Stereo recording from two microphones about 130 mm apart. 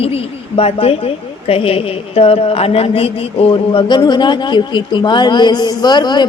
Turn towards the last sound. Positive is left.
turn(degrees=35)  # may be behind; listen again after turning